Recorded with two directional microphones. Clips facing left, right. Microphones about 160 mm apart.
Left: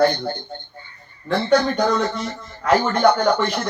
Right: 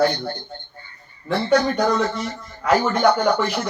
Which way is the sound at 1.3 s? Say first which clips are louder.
Left 1 dB; 5° right (ahead or behind).